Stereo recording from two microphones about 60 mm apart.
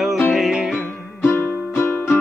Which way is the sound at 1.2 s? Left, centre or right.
Left.